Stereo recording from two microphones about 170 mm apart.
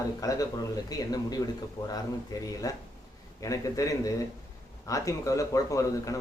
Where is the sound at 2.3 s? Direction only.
20° left (ahead or behind).